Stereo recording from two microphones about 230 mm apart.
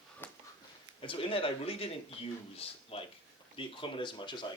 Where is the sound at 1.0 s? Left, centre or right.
Left.